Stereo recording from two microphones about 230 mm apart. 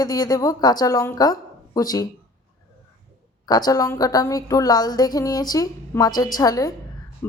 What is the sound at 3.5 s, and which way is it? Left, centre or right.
A woman's voice, centre.